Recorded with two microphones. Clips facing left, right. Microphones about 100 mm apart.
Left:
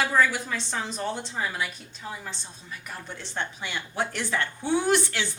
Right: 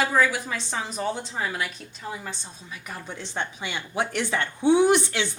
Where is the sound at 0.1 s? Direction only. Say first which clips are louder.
Right 1 dB; 10° right (ahead or behind).